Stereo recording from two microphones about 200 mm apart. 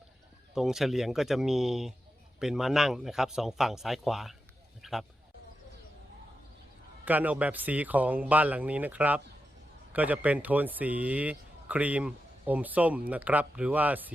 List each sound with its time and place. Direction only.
0.5 s speech: centre (ahead or behind)
4.8 s a sound: centre (ahead or behind)
7.0 s speech: 10° right (ahead or behind)